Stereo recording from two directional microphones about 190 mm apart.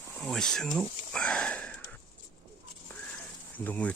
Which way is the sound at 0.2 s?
Centre (ahead or behind).